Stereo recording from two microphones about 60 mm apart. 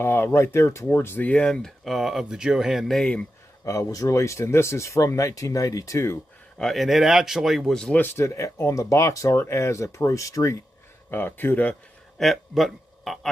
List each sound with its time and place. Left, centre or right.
0.0 s speech: left
0.9 s speech: left
1.3 s speech: centre
1.9 s speech: centre
2.7 s a man's voice: centre
3.6 s speech: left
6.6 s a man's voice: centre
7.7 s speech: centre
8.2 s speech: left
9.4 s speech: left
11.1 s speech: left
12.2 s a man's voice: centre